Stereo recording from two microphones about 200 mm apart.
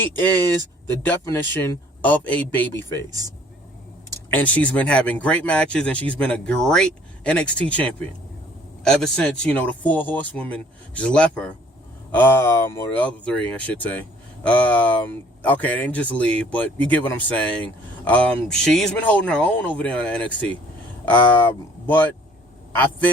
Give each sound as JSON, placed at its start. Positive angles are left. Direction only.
{"t": 1.0, "sound": "speech", "side_deg": 10}
{"t": 3.1, "sound": "speech", "side_deg": -15}
{"t": 4.1, "sound": "speech", "side_deg": 10}